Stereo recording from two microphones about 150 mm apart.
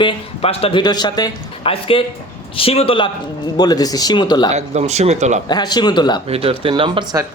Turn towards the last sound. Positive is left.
turn(degrees=-35)  # may be behind; listen again after turning